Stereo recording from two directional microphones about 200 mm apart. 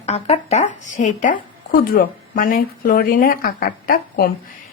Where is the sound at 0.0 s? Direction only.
35° left (ahead or behind).